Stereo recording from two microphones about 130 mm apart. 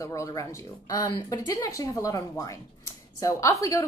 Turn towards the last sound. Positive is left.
turn(degrees=25)  # may be behind; listen again after turning